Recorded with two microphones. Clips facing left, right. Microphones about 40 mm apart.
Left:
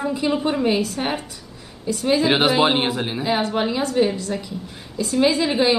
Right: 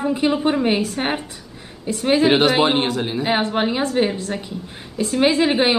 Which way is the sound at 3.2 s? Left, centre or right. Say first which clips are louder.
Right 1 dB; right.